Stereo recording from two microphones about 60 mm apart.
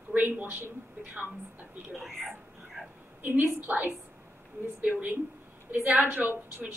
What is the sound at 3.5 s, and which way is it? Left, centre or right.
A woman's voice, right.